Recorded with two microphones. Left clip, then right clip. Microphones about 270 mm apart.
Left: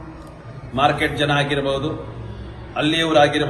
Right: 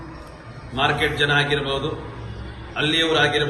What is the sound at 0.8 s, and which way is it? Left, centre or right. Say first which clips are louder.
A man's voice: left 2 dB; left.